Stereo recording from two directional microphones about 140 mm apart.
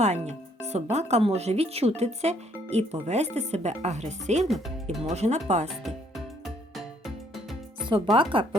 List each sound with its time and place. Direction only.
0.0 s speech: 55° right (ahead or behind)
4.4 s speech: centre (ahead or behind)
5.0 s speech: 50° right (ahead or behind)
5.6 s music: centre (ahead or behind)
8.1 s speech: 40° right (ahead or behind)